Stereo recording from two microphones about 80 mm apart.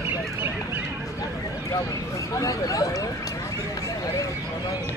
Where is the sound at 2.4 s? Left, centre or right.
Left.